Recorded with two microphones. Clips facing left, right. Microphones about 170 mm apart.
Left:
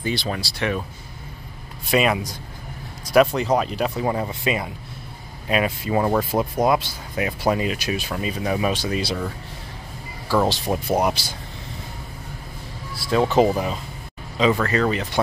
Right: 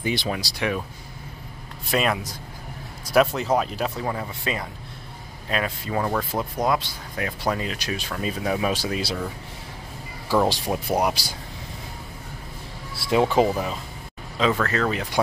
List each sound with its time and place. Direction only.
0.0 s speech: 15° right (ahead or behind)
1.9 s speech: 5° left (ahead or behind)
4.0 s speech: 20° left (ahead or behind); by 9.3 s centre (ahead or behind)
10.7 s speech: centre (ahead or behind)
12.9 s a sound: 25° right (ahead or behind)
13.4 s speech: centre (ahead or behind)